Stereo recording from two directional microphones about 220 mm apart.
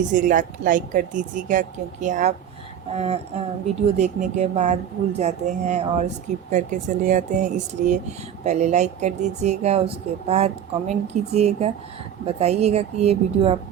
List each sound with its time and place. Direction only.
0.1 s speech: 35° right (ahead or behind)